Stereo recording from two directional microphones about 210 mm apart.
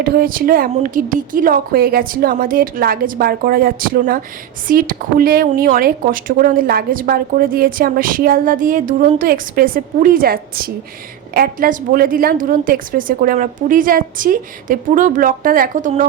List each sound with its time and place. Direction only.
0.0 s a woman's voice: 45° right (ahead or behind)